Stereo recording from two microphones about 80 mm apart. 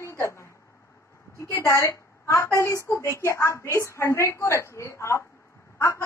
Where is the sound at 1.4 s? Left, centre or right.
Left.